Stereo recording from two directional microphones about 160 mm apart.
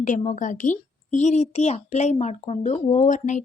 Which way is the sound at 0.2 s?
50° left (ahead or behind).